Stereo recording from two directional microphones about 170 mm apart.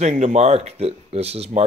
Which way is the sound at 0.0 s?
40° right (ahead or behind).